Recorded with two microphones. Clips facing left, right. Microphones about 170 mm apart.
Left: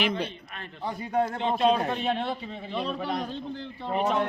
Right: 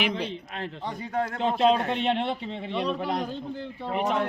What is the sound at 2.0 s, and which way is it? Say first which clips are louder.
A man's voice: right 2 dB; 25° right (ahead or behind).